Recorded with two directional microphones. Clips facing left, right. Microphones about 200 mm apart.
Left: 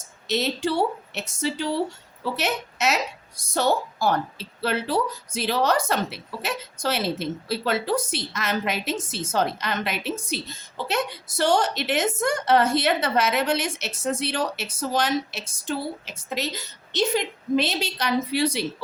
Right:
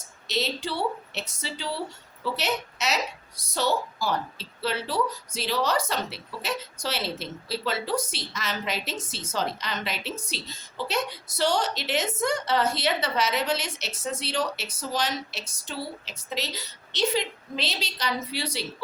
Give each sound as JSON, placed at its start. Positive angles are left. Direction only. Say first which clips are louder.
{"t": 0.3, "sound": "a woman's voice", "louder": "left 5 dB", "side_deg": 50}